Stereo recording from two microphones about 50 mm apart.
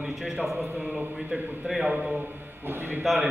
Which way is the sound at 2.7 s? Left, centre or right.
Right.